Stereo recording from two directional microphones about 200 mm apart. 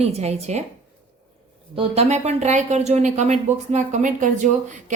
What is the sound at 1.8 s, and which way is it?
A woman's voice, 35° right (ahead or behind).